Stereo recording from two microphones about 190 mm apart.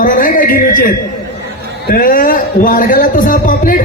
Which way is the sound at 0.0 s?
45° left (ahead or behind).